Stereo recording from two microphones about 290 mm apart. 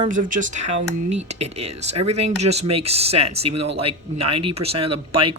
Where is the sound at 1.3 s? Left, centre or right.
Right.